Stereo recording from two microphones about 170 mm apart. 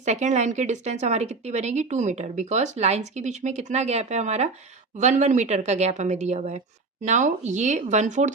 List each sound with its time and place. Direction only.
0.0 s a woman's voice: 45° right (ahead or behind)